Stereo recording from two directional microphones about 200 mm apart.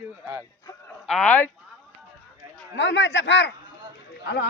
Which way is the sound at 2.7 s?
65° left (ahead or behind).